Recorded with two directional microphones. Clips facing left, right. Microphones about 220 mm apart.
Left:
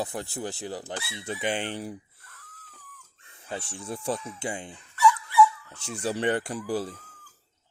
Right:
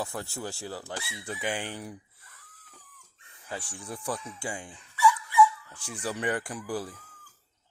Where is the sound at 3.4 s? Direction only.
25° left (ahead or behind).